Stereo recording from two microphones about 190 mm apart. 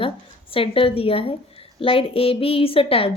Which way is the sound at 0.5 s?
30° left (ahead or behind).